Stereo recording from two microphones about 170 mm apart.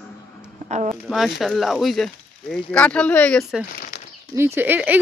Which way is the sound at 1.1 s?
Centre (ahead or behind).